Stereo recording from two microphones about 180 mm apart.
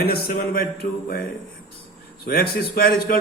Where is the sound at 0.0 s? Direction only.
60° left (ahead or behind).